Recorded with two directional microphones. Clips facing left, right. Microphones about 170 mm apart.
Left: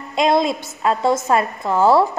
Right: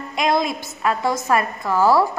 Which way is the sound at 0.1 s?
25° left (ahead or behind).